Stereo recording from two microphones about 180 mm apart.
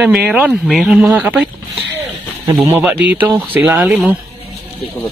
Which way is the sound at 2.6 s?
10° right (ahead or behind).